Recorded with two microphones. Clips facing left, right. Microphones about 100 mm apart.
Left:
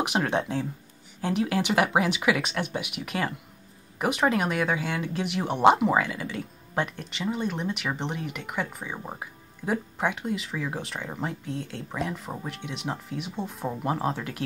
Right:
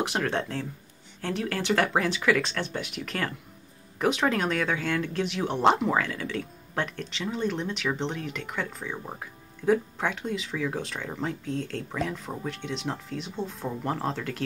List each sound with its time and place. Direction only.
0.0 s speech: 20° left (ahead or behind)